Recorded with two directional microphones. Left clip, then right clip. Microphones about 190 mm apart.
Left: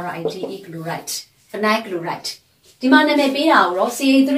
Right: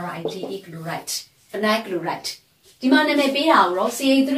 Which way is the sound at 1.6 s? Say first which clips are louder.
Left 2 dB; 15° right (ahead or behind).